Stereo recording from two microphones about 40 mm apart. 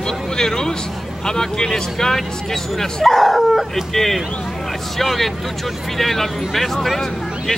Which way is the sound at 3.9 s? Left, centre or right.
Centre.